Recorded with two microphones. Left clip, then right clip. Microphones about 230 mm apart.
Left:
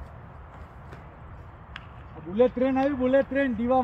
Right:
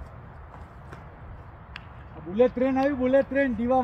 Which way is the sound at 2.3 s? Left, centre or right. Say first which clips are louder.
Even; centre.